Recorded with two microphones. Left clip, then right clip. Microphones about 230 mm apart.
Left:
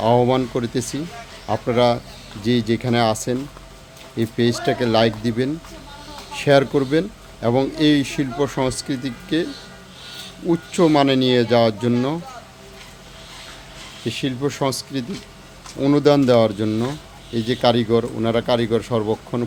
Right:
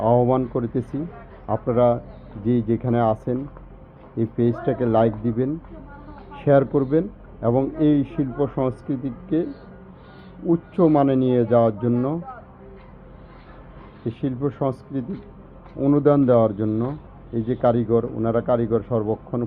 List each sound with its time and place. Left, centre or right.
0.0 s speech: left
10.5 s speech: left
14.1 s speech: left